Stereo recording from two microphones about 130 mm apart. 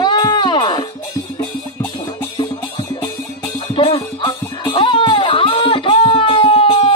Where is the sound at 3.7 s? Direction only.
40° left (ahead or behind).